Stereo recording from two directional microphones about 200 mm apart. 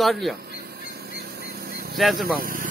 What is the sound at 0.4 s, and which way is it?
Squawk, 50° right (ahead or behind).